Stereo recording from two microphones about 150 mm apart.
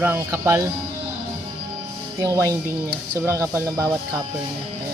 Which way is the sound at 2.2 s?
20° right (ahead or behind).